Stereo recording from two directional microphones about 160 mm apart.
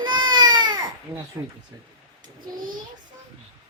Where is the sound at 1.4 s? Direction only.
15° right (ahead or behind).